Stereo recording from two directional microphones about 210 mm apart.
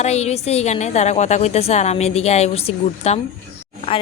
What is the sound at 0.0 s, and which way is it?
A woman's voice, 30° left (ahead or behind).